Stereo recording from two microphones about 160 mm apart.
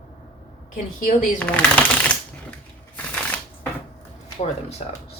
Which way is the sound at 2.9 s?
10° left (ahead or behind).